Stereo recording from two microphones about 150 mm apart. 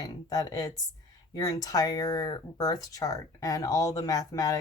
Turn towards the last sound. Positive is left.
turn(degrees=25)  # may be behind; listen again after turning